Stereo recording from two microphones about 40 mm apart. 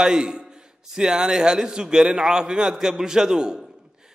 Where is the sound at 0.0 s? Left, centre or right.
Centre.